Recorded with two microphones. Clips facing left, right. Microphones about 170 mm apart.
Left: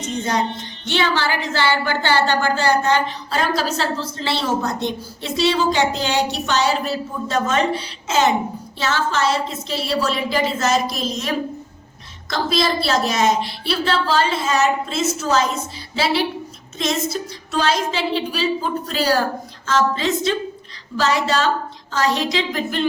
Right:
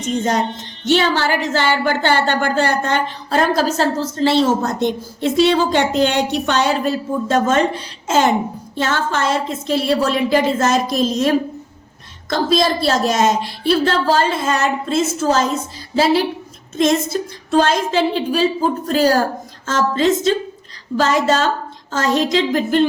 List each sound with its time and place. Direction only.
0.5 s speech: 45° right (ahead or behind)